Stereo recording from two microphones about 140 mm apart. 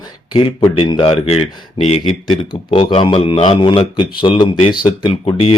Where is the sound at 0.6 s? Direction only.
40° left (ahead or behind).